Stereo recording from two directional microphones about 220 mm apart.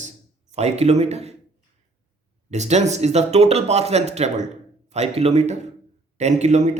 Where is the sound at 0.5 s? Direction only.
30° right (ahead or behind).